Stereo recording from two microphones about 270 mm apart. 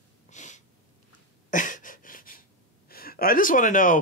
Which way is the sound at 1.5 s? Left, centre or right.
Left.